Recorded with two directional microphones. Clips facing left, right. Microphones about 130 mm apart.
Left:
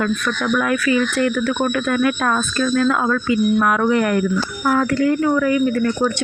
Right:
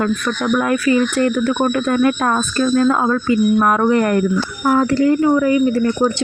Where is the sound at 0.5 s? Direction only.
35° right (ahead or behind).